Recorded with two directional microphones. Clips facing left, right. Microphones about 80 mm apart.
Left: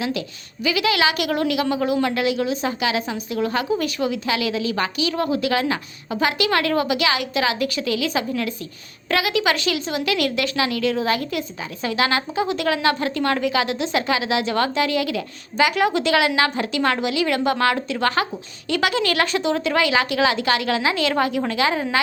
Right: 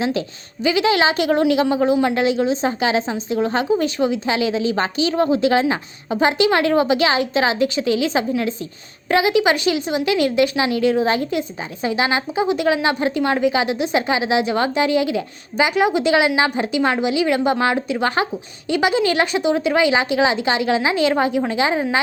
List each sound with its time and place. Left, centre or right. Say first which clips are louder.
0.0 s a woman's voice: right 4 dB; right